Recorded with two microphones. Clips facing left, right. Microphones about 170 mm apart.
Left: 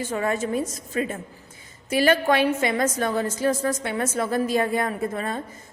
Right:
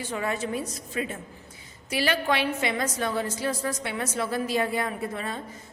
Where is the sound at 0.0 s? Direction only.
45° left (ahead or behind).